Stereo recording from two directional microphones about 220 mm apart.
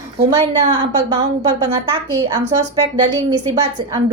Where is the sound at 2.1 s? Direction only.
15° right (ahead or behind).